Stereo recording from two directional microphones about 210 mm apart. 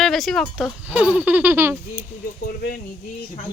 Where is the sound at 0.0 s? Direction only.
Centre (ahead or behind).